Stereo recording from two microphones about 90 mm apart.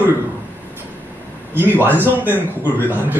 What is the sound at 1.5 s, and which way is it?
A man's voice, 20° right (ahead or behind).